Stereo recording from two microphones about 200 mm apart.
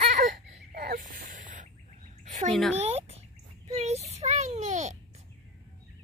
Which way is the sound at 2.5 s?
Centre (ahead or behind).